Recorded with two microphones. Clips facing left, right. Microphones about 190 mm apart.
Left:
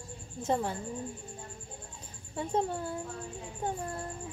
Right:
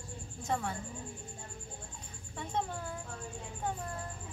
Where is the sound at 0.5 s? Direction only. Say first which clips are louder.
Left 5 dB; 30° left (ahead or behind).